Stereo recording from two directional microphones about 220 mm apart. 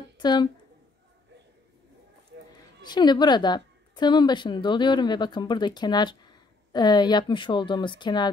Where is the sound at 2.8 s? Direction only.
20° left (ahead or behind).